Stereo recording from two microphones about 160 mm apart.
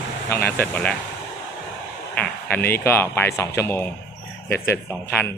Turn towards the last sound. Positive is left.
turn(degrees=10)  # may be behind; listen again after turning